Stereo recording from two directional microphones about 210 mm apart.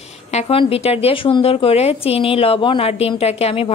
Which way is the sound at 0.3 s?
30° left (ahead or behind).